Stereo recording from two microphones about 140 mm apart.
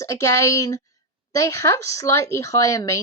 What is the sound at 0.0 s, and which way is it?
Speech, 20° left (ahead or behind).